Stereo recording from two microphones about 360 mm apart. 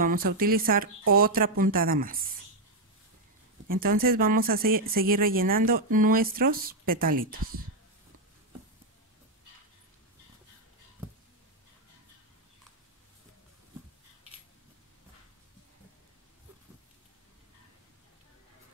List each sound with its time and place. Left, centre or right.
0.0 s speech: right
3.6 s speech: right